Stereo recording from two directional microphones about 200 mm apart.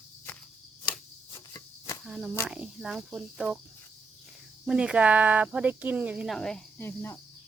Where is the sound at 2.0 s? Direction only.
Centre (ahead or behind).